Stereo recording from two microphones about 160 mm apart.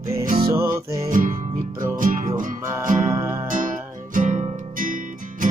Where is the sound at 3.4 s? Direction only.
55° right (ahead or behind).